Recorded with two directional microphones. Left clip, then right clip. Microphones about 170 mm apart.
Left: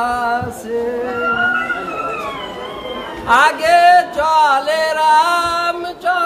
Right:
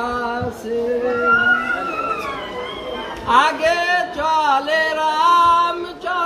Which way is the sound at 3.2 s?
25° left (ahead or behind).